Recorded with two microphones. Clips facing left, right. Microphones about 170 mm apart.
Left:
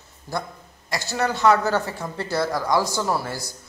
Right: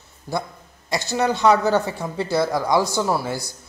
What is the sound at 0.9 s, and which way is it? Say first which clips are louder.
Speech: right 3 dB; 20° right (ahead or behind).